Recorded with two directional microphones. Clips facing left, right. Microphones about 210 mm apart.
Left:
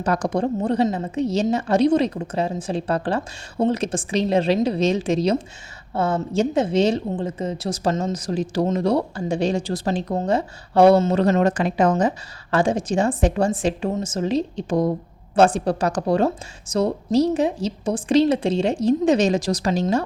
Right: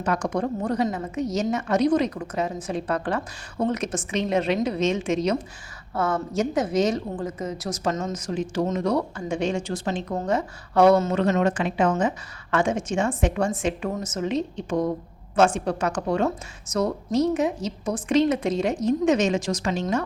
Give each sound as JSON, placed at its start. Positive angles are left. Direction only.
{"t": 0.0, "sound": "a woman's voice", "side_deg": 35}